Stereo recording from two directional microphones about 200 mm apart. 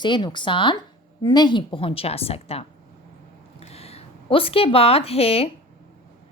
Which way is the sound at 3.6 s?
30° left (ahead or behind).